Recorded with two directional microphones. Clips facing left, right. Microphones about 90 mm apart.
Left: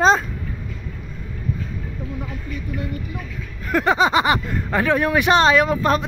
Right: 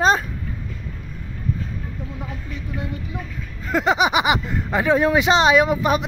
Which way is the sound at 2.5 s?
25° right (ahead or behind).